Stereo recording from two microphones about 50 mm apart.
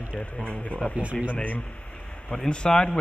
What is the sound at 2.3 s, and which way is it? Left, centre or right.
Speech, centre.